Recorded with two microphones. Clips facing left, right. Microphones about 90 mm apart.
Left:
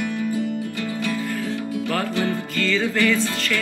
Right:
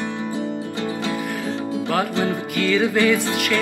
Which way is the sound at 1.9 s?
20° right (ahead or behind).